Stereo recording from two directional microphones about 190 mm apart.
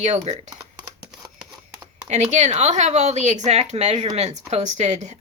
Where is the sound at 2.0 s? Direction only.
35° right (ahead or behind).